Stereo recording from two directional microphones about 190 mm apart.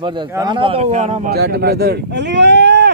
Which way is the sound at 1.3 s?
55° right (ahead or behind).